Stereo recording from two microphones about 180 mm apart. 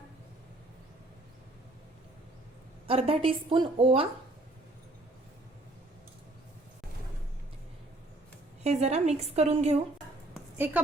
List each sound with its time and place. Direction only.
2.8 s a woman's voice: 30° right (ahead or behind)
8.6 s a woman's voice: 35° right (ahead or behind)